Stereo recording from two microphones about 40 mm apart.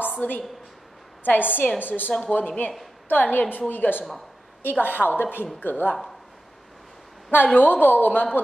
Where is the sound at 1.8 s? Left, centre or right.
Left.